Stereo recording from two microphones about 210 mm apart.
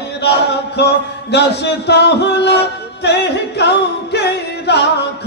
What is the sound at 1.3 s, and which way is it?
Music, 50° left (ahead or behind).